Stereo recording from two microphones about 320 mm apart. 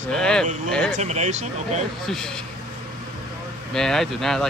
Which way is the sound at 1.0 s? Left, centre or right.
Right.